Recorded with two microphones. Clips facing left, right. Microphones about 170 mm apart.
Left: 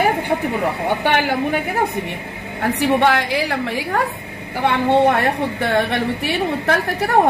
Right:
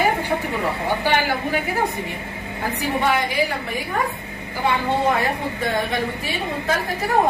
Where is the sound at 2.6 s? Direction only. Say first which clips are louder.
Left 7 dB; 75° left (ahead or behind).